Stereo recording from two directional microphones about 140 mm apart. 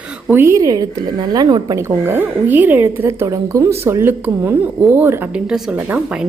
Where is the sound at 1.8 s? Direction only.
15° right (ahead or behind).